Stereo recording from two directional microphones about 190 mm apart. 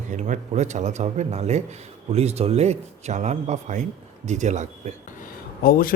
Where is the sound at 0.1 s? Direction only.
40° right (ahead or behind).